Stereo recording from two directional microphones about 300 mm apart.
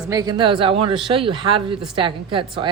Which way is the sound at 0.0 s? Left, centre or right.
Centre.